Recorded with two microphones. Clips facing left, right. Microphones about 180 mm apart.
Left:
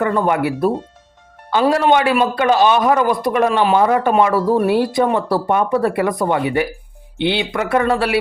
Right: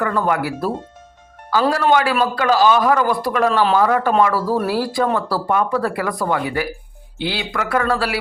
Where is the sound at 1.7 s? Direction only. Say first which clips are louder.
Left 3 dB; 20° left (ahead or behind).